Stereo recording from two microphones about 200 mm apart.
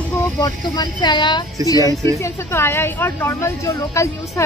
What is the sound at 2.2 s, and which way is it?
A woman's voice, 10° left (ahead or behind).